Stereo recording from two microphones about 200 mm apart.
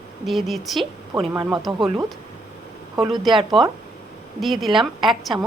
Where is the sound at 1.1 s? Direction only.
15° right (ahead or behind).